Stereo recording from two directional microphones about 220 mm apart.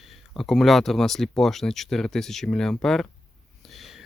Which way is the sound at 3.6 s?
Centre (ahead or behind).